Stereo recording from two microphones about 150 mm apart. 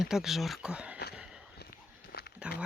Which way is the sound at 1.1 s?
5° right (ahead or behind).